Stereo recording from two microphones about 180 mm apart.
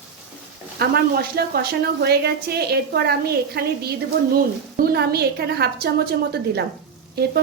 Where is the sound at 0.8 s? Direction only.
60° right (ahead or behind).